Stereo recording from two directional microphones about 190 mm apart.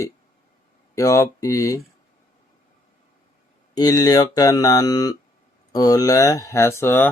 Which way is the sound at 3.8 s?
20° left (ahead or behind).